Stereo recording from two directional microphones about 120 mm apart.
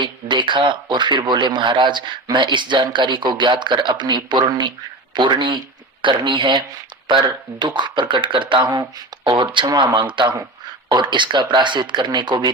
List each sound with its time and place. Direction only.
0.0 s a man's voice: 40° right (ahead or behind)
7.6 s a man's voice: 40° right (ahead or behind)